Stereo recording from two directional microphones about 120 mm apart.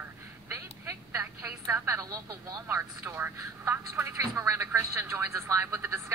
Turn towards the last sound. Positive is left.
turn(degrees=-20)  # may be behind; listen again after turning